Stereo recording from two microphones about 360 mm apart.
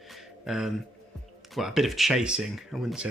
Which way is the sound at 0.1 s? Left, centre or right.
Centre.